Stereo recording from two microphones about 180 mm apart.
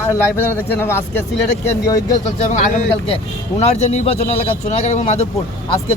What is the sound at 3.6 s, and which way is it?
Speech, 35° left (ahead or behind).